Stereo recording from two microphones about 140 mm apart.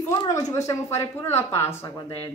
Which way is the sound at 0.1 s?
25° left (ahead or behind).